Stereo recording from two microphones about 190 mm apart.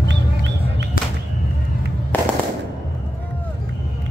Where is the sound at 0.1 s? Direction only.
70° right (ahead or behind).